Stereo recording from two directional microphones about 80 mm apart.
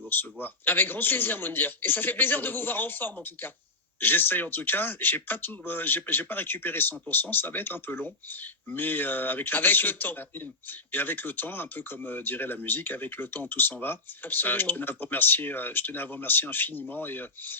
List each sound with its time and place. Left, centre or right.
0.1 s speech: left